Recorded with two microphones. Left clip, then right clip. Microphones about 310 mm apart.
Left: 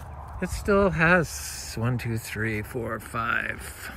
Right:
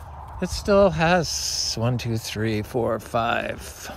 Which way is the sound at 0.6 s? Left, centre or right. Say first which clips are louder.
Right 4 dB; centre.